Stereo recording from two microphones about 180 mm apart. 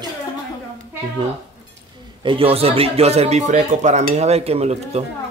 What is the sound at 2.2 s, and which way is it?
Speech, 30° right (ahead or behind).